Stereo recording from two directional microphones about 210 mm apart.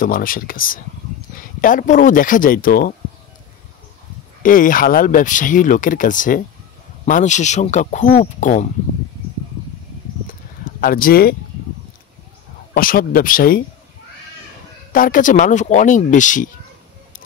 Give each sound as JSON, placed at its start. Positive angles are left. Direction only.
{"t": 0.0, "sound": "speech", "side_deg": 40}
{"t": 4.4, "sound": "speech", "side_deg": 40}
{"t": 10.2, "sound": "a sound", "side_deg": 40}
{"t": 12.7, "sound": "speech", "side_deg": 45}
{"t": 14.9, "sound": "speech", "side_deg": 40}